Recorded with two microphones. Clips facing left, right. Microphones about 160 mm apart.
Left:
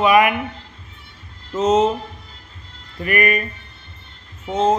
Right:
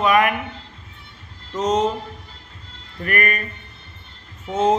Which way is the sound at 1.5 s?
5° left (ahead or behind).